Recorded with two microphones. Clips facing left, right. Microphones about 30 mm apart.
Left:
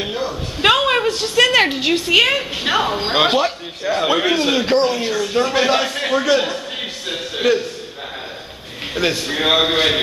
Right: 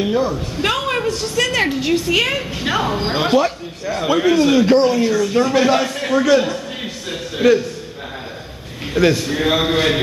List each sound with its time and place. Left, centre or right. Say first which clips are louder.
0.0 s speech: right 5 dB; centre
0.6 s a man's voice: left 6 dB; left
8.9 s a man's voice: right 4 dB; centre